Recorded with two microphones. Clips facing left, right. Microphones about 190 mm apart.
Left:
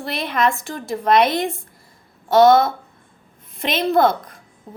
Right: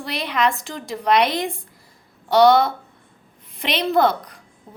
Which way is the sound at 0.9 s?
50° left (ahead or behind).